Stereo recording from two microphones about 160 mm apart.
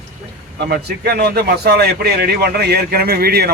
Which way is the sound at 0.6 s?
75° right (ahead or behind).